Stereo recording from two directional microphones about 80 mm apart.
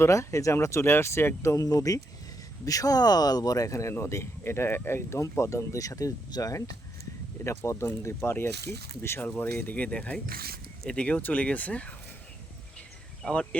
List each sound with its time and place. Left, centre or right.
0.0 s speech: left
7.4 s speech: left; by 11.9 s centre
13.2 s speech: centre